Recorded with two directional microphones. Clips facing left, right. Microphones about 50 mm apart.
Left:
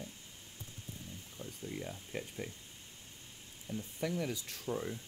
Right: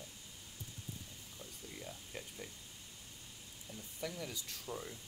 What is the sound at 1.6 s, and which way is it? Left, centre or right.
Speech, left.